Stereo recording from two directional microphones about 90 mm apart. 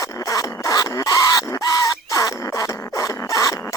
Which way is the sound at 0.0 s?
40° left (ahead or behind).